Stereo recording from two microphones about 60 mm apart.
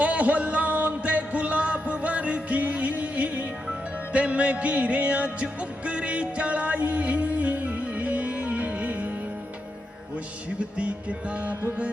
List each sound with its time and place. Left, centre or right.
0.0 s music: right
10.8 s music: right